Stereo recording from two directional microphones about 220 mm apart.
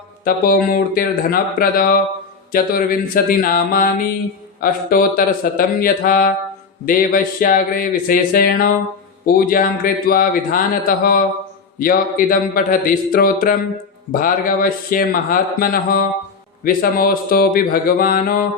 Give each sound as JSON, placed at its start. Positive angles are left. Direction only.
{"t": 0.3, "sound": "speech", "side_deg": 40}